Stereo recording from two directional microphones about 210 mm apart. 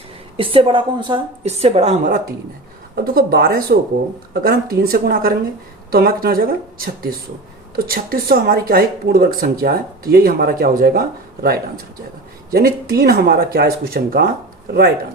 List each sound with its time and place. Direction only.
0.3 s a woman's voice: 25° right (ahead or behind); by 11.0 s 45° right (ahead or behind)
12.5 s speech: 45° right (ahead or behind)